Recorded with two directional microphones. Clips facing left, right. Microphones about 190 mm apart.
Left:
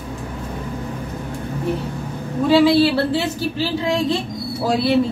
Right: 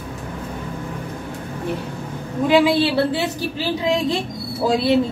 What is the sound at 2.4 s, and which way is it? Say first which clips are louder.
Speech: left 2 dB; 15° right (ahead or behind).